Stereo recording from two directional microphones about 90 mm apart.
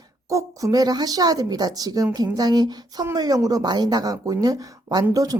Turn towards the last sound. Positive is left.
turn(degrees=-45)  # may be behind; listen again after turning